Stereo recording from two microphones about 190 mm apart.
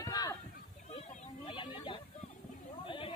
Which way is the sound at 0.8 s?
35° left (ahead or behind).